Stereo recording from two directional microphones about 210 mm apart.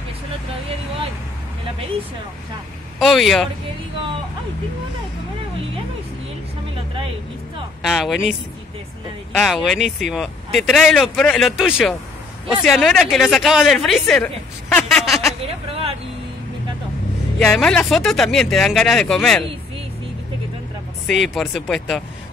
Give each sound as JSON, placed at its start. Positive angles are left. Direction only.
{"t": 3.0, "sound": "speech", "side_deg": 0}
{"t": 7.8, "sound": "speech", "side_deg": 0}
{"t": 15.4, "sound": "a sound", "side_deg": -30}
{"t": 17.4, "sound": "speech", "side_deg": 0}
{"t": 21.1, "sound": "speech", "side_deg": 0}